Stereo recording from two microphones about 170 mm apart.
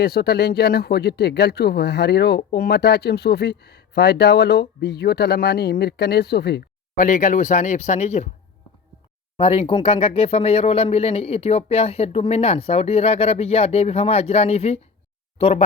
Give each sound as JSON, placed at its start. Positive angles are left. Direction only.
{"t": 0.0, "sound": "speech", "side_deg": 70}
{"t": 6.9, "sound": "speech", "side_deg": 50}
{"t": 9.4, "sound": "speech", "side_deg": 35}